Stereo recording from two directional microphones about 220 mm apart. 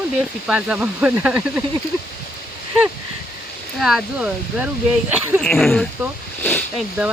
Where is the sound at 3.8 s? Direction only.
Centre (ahead or behind).